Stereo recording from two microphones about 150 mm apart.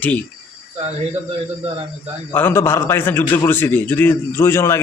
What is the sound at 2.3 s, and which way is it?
A man's voice, 15° left (ahead or behind).